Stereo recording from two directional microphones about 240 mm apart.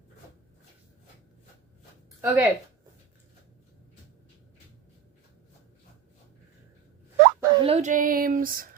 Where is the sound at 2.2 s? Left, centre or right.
Centre.